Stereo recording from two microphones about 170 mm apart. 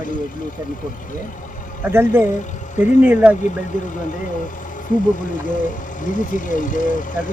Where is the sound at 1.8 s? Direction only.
15° right (ahead or behind).